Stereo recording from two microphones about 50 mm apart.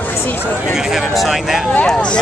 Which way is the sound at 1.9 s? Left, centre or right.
Centre.